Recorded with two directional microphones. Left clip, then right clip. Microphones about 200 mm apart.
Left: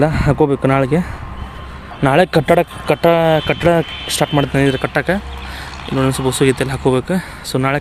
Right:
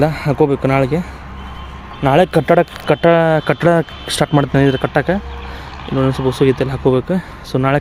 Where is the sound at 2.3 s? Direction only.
10° right (ahead or behind).